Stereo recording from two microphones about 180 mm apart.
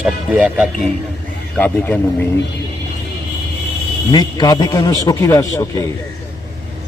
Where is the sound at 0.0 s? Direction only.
5° right (ahead or behind).